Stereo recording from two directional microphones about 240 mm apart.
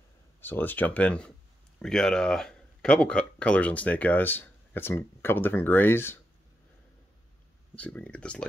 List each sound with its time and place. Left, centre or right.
0.4 s speech: centre
7.7 s speech: centre